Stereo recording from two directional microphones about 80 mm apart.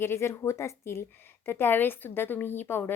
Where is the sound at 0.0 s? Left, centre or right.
Left.